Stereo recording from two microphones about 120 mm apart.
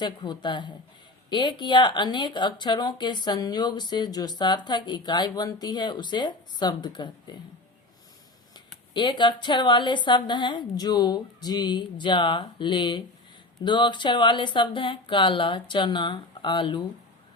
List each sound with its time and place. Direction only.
0.0 s speech: 40° left (ahead or behind)
8.9 s speech: 40° left (ahead or behind)